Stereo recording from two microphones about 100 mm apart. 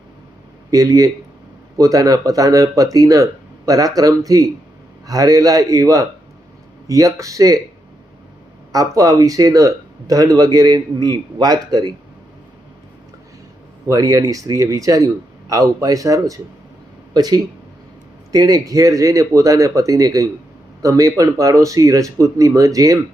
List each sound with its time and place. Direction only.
0.7 s speech: 35° right (ahead or behind)
8.7 s speech: 35° right (ahead or behind)
13.8 s speech: 35° right (ahead or behind)